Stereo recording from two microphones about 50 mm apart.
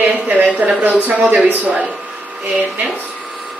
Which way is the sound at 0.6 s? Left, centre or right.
Right.